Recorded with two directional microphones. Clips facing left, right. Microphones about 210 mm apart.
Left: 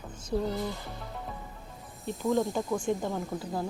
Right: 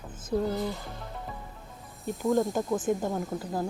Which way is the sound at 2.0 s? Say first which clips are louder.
Right 2 dB; centre (ahead or behind).